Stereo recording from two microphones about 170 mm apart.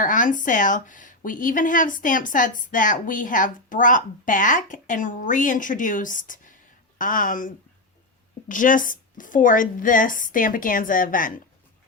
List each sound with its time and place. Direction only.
0.0 s speech: 50° left (ahead or behind)